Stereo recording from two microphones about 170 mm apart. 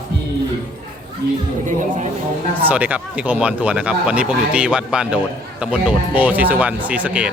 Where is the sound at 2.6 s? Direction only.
10° right (ahead or behind).